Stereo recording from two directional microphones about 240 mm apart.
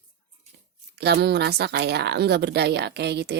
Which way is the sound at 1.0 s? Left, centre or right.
Right.